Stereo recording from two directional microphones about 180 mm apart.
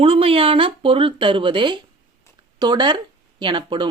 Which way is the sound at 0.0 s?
30° right (ahead or behind).